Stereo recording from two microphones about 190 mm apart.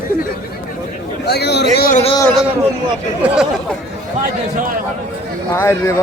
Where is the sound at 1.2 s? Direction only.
60° left (ahead or behind).